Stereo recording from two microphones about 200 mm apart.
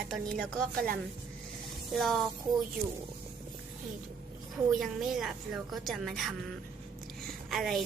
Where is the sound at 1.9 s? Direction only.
Centre (ahead or behind).